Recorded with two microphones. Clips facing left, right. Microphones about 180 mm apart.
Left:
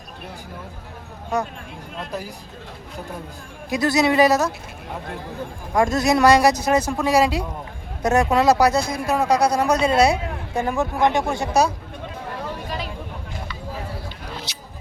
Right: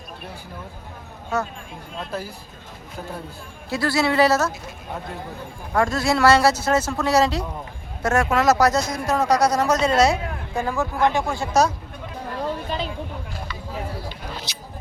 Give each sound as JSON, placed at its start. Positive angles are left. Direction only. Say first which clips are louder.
{"t": 1.3, "sound": "speech", "louder": "left 1 dB", "side_deg": 15}
{"t": 3.7, "sound": "speech", "louder": "left 3 dB", "side_deg": 20}
{"t": 5.7, "sound": "speech", "louder": "left 2 dB", "side_deg": 20}
{"t": 12.6, "sound": "a sound", "louder": "right 2 dB", "side_deg": -30}